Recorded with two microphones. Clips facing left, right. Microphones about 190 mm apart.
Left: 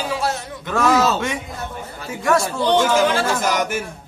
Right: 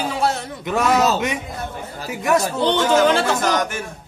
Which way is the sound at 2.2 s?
20° right (ahead or behind).